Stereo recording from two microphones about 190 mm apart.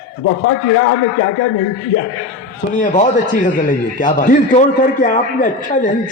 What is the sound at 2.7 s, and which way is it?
A man's voice, 40° left (ahead or behind).